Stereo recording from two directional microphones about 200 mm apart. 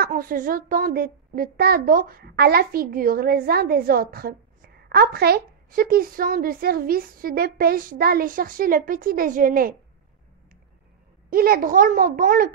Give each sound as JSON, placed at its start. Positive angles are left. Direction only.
{"t": 0.0, "sound": "a woman's voice", "side_deg": -45}
{"t": 11.2, "sound": "a woman's voice", "side_deg": -45}